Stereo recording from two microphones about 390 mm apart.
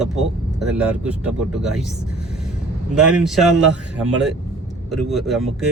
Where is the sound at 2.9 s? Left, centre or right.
Centre.